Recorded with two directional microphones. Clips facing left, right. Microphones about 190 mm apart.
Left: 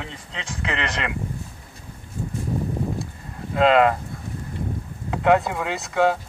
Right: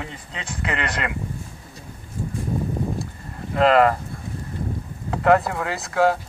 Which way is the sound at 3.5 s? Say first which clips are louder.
Even; centre (ahead or behind).